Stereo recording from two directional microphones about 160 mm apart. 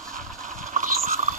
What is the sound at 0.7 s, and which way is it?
Vehicle, 55° right (ahead or behind).